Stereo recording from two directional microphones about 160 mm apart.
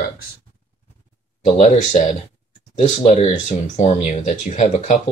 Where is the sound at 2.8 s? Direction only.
40° left (ahead or behind).